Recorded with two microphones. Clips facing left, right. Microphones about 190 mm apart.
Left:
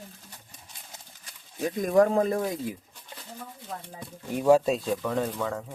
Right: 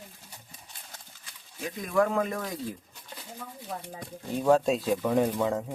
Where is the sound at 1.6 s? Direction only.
40° left (ahead or behind).